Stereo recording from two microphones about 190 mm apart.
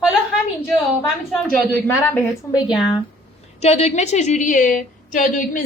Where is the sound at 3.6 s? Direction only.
35° left (ahead or behind).